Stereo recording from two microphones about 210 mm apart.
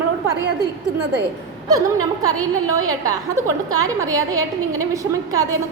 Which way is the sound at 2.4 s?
15° right (ahead or behind).